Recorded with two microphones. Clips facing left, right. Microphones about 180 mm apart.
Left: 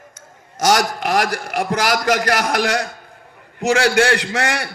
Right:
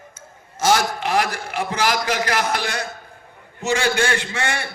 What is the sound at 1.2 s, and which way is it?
A man's voice, 45° left (ahead or behind).